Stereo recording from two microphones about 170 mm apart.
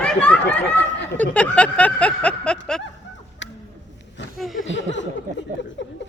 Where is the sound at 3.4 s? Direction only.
90° left.